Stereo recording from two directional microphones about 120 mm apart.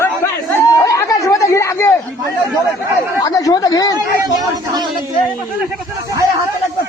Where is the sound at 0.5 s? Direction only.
25° left (ahead or behind).